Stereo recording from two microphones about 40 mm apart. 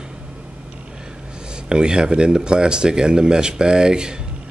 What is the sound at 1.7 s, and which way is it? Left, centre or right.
Speech, right.